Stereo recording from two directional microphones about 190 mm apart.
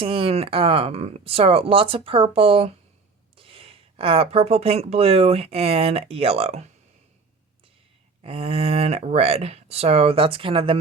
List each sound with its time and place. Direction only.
0.0 s speech: 30° right (ahead or behind)
8.2 s speech: 30° right (ahead or behind)